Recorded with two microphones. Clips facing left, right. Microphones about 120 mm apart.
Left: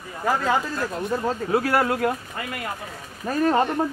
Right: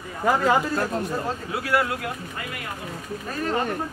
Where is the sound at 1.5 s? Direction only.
45° left (ahead or behind).